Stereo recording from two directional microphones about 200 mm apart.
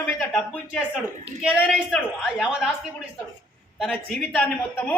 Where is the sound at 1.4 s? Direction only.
5° right (ahead or behind).